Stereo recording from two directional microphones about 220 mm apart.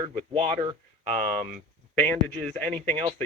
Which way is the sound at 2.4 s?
5° left (ahead or behind).